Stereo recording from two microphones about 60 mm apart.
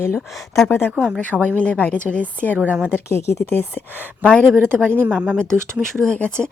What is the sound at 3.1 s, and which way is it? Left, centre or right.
Speech, left.